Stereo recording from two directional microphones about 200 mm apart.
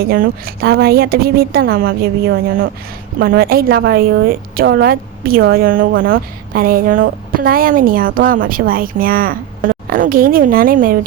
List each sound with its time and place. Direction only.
0.0 s a woman's voice: 50° right (ahead or behind)